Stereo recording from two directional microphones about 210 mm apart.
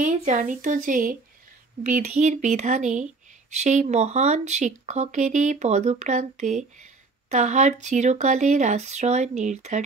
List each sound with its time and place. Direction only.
0.0 s speech: 35° right (ahead or behind)